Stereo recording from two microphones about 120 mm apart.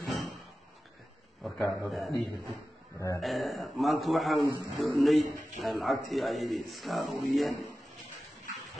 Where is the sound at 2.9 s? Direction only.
25° left (ahead or behind).